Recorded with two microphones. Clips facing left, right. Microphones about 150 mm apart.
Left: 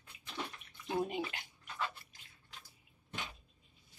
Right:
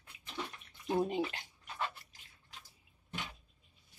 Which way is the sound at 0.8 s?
30° right (ahead or behind).